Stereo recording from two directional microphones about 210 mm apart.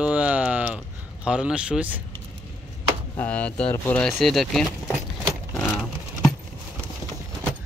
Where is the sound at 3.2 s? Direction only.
5° left (ahead or behind).